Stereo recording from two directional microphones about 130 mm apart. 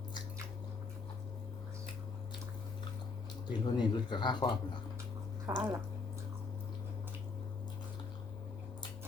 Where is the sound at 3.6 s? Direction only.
35° left (ahead or behind).